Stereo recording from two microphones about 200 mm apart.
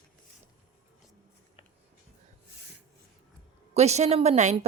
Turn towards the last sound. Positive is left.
turn(degrees=-35)  # may be behind; listen again after turning